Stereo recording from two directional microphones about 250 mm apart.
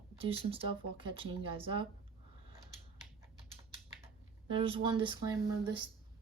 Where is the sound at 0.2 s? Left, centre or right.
Right.